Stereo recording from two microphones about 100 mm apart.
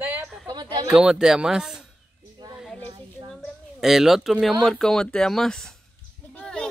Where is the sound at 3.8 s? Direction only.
5° right (ahead or behind).